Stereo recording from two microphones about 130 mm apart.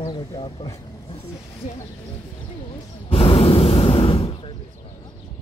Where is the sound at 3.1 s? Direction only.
45° left (ahead or behind).